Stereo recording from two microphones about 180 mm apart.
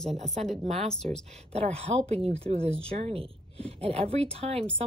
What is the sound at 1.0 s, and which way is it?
A woman's voice, 45° right (ahead or behind).